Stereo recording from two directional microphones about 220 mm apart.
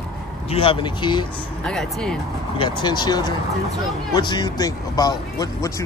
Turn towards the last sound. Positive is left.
turn(degrees=15)  # may be behind; listen again after turning